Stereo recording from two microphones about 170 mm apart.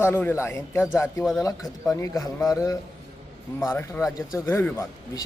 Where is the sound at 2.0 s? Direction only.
20° left (ahead or behind).